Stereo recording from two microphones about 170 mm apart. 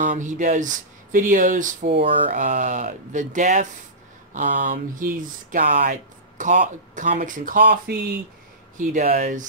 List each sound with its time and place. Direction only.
0.0 s speech: 50° right (ahead or behind); by 8.0 s 65° right (ahead or behind)
8.7 s speech: 50° right (ahead or behind)